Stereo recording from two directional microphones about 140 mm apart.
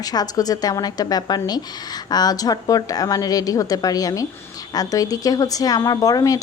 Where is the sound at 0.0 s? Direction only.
25° left (ahead or behind).